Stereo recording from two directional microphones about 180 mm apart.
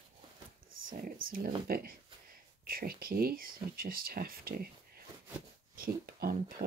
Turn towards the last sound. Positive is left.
turn(degrees=-55)  # may be behind; listen again after turning